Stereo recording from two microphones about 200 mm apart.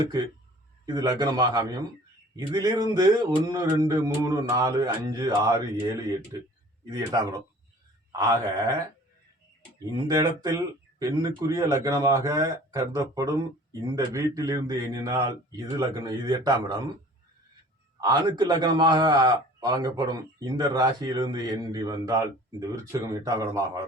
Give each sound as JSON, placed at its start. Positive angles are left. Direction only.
{"t": 0.9, "sound": "a man's voice", "side_deg": -20}
{"t": 10.1, "sound": "speech", "side_deg": -15}
{"t": 18.0, "sound": "a man's voice", "side_deg": -20}